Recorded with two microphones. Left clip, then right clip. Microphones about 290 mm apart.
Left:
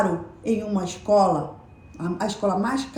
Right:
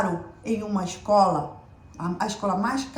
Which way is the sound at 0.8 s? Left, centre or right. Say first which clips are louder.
Even; right.